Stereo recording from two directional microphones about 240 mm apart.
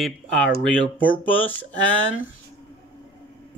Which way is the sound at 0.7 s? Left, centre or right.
Centre.